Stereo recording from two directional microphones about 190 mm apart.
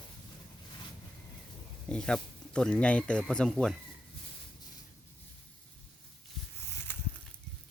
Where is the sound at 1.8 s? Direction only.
5° left (ahead or behind).